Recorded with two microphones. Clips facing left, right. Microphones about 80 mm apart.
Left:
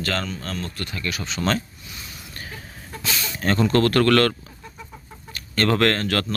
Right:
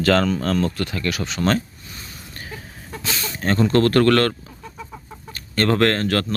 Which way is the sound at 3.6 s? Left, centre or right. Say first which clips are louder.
Right 3 dB; right.